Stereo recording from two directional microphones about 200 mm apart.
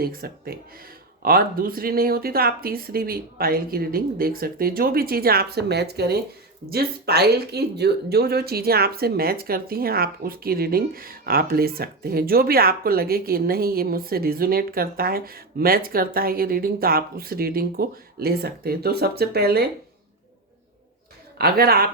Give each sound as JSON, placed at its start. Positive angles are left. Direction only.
{"t": 0.0, "sound": "speech", "side_deg": -50}
{"t": 21.3, "sound": "speech", "side_deg": -50}